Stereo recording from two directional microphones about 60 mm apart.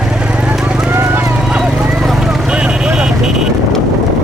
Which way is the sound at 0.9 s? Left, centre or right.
Right.